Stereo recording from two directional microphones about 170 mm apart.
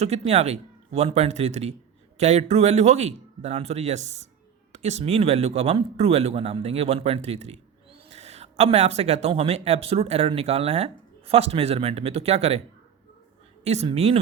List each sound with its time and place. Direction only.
0.0 s speech: 40° right (ahead or behind)
13.7 s speech: 35° right (ahead or behind)